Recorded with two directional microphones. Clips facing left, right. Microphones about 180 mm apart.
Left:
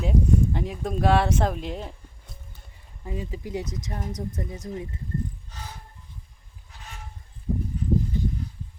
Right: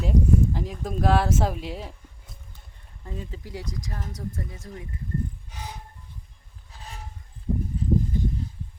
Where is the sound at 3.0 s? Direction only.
10° left (ahead or behind).